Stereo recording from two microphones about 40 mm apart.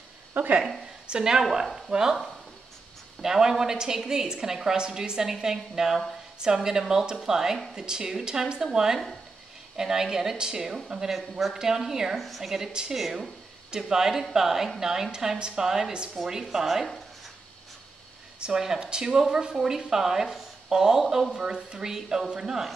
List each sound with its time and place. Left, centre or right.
0.3 s speech: right
1.0 s a woman's voice: centre
3.2 s a woman's voice: centre
11.1 s a woman's voice: centre
11.5 s a woman's voice: centre
12.2 s a woman's voice: centre
18.4 s a woman's voice: centre
21.4 s a woman's voice: centre